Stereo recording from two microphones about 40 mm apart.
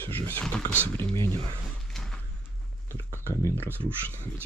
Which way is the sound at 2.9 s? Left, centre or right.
Right.